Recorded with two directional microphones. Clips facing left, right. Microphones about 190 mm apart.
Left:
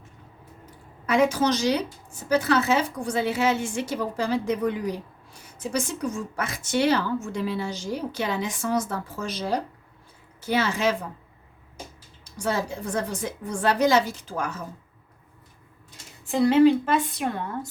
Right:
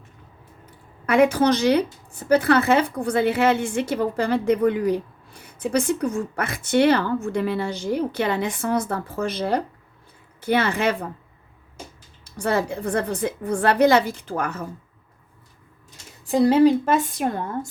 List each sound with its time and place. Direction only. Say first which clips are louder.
0.6 s a woman's voice: right 4 dB; 60° right (ahead or behind)
12.2 s a woman's voice: right 4 dB; 60° right (ahead or behind)
16.2 s a woman's voice: right 2 dB; 40° right (ahead or behind)